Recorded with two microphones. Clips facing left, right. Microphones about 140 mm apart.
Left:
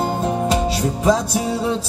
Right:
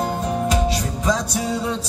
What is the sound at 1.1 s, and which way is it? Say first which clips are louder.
Music: left 4 dB; 30° left (ahead or behind).